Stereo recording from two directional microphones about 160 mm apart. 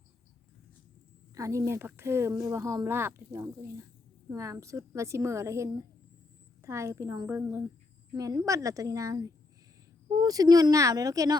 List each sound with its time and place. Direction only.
1.4 s speech: 20° right (ahead or behind)